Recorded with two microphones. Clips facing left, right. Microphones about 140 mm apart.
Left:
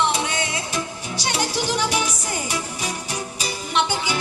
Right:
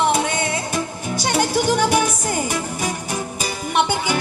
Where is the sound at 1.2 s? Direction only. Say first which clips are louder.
Right 6 dB; 50° right (ahead or behind).